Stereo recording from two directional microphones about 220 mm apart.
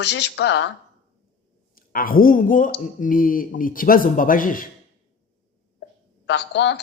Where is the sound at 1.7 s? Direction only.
40° left (ahead or behind).